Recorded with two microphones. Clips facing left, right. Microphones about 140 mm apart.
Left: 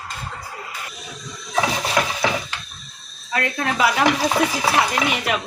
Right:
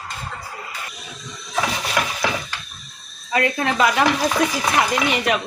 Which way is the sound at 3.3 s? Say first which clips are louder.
Right 3 dB; centre (ahead or behind).